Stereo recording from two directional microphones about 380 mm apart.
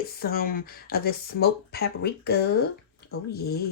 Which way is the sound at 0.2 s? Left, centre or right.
Left.